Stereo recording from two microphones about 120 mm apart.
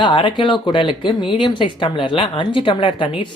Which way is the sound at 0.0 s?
40° left (ahead or behind).